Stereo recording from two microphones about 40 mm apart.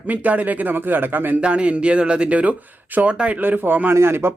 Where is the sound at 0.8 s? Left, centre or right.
Right.